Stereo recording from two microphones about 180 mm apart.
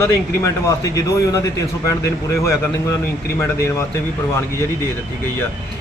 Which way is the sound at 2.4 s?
15° left (ahead or behind).